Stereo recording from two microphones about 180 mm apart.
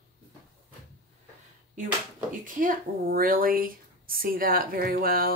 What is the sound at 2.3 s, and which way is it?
Speech, 45° right (ahead or behind).